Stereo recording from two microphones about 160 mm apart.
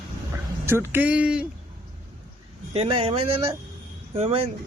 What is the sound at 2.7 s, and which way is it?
Speech, 35° right (ahead or behind).